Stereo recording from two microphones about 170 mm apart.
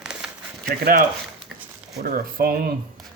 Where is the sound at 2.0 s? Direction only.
60° right (ahead or behind).